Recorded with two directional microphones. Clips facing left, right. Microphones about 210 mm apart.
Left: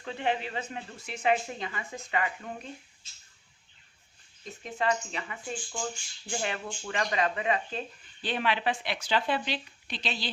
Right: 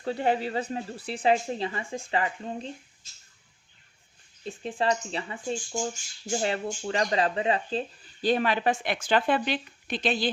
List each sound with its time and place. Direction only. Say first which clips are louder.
0.0 s speech: right 5 dB; 40° right (ahead or behind)
4.4 s speech: right 3 dB; 30° right (ahead or behind)
5.7 s speech: right 5 dB; 45° right (ahead or behind)